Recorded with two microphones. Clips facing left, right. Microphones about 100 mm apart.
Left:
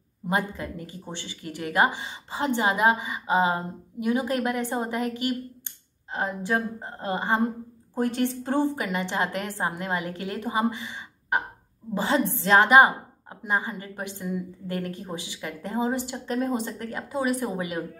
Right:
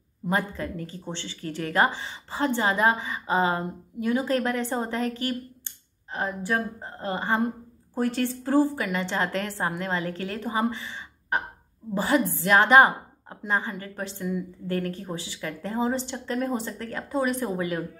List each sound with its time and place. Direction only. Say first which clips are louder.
0.3 s a woman's voice: even; 15° left (ahead or behind)
12.6 s a woman's voice: even; 10° left (ahead or behind)
17.1 s speech: even; 10° left (ahead or behind)
17.5 s a woman's voice: right 2 dB; 20° left (ahead or behind)